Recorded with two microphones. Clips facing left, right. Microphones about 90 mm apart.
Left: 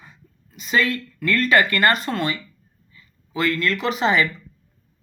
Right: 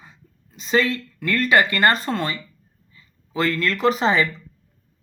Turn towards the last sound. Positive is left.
turn(degrees=-35)  # may be behind; listen again after turning